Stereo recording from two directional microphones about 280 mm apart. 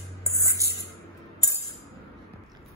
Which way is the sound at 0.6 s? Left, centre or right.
Centre.